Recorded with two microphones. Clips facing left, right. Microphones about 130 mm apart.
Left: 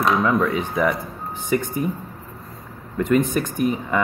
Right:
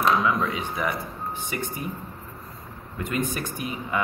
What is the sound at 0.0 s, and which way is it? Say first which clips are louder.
Speech: left 3 dB; 50° left (ahead or behind).